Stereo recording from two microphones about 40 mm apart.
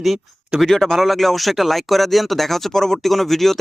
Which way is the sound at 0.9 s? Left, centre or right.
Centre.